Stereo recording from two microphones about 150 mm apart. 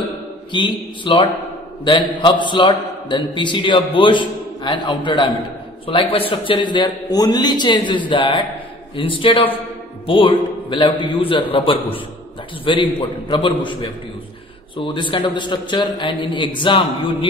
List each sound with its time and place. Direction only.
0.5 s a man's voice: 30° left (ahead or behind)